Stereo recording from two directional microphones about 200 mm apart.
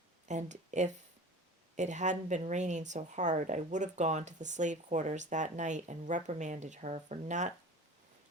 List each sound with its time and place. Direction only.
0.3 s speech: 35° right (ahead or behind)